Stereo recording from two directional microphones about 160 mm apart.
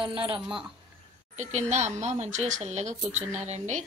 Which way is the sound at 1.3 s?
45° right (ahead or behind).